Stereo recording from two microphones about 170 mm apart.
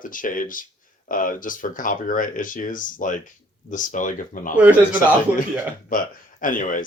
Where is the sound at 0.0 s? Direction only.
50° left (ahead or behind).